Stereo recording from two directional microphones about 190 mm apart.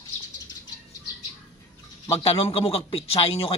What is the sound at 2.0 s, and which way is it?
Speech, 30° left (ahead or behind).